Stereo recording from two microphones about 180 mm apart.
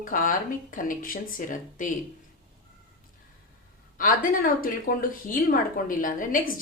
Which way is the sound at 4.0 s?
50° left (ahead or behind).